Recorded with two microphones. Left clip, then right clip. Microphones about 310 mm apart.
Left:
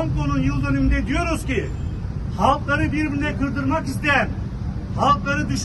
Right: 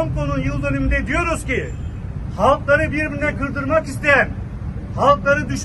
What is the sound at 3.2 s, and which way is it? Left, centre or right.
A man's voice, centre.